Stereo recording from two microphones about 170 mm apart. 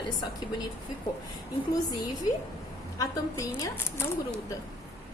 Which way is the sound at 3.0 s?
20° left (ahead or behind).